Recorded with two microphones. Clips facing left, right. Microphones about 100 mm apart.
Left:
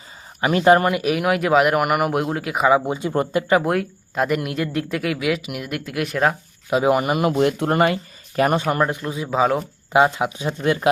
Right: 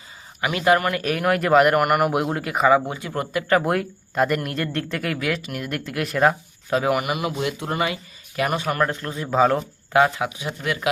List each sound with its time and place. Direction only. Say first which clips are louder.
0.4 s speech: left 4 dB; 30° left (ahead or behind)
0.9 s speech: left 2 dB; 5° left (ahead or behind)
2.7 s speech: left 2 dB; 20° left (ahead or behind)
3.6 s speech: left 1 dB; centre (ahead or behind)
6.7 s speech: left 3 dB; 15° left (ahead or behind)
6.9 s speech: left 4 dB; 30° left (ahead or behind)
7.2 s speech: left 7 dB; 50° left (ahead or behind)
8.4 s speech: left 4 dB; 35° left (ahead or behind); by 9.6 s 5° left (ahead or behind)
9.9 s speech: left 2 dB; 20° left (ahead or behind)